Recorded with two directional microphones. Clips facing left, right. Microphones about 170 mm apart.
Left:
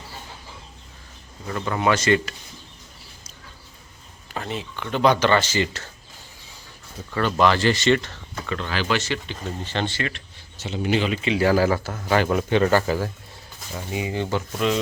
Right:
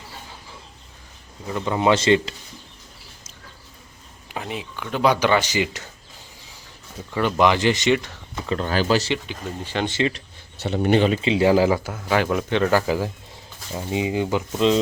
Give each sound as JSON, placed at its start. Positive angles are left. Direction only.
{"t": 1.5, "sound": "speech", "side_deg": -15}
{"t": 4.3, "sound": "speech", "side_deg": -10}
{"t": 7.1, "sound": "speech", "side_deg": -15}
{"t": 8.4, "sound": "speech", "side_deg": -40}
{"t": 9.1, "sound": "speech", "side_deg": -10}
{"t": 10.6, "sound": "speech", "side_deg": -55}
{"t": 11.1, "sound": "speech", "side_deg": -25}
{"t": 11.9, "sound": "speech", "side_deg": 0}
{"t": 13.7, "sound": "speech", "side_deg": -20}